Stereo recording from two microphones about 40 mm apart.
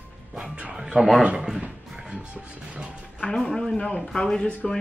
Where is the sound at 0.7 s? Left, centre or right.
Centre.